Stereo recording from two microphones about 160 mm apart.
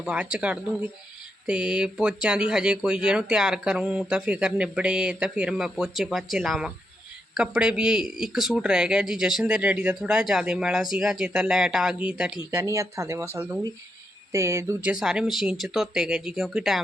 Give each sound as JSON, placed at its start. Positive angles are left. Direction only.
{"t": 0.0, "sound": "speech", "side_deg": -5}
{"t": 12.5, "sound": "speech", "side_deg": -15}